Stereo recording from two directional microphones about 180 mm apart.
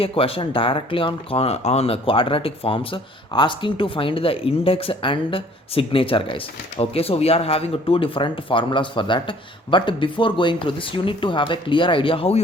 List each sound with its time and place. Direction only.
0.0 s speech: 30° left (ahead or behind)